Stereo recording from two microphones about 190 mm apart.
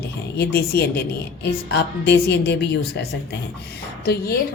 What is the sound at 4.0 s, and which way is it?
Speech, 55° left (ahead or behind).